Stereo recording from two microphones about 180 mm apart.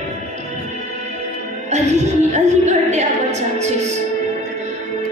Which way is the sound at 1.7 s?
40° right (ahead or behind).